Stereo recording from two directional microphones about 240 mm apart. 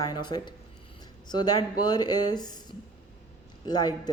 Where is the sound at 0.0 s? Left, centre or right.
Centre.